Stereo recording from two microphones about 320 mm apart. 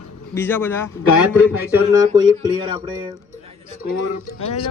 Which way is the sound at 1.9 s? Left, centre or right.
Centre.